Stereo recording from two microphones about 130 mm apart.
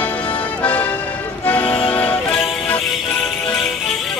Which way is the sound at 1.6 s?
45° left (ahead or behind).